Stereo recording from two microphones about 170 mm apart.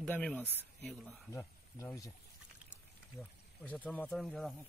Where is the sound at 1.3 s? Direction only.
20° left (ahead or behind).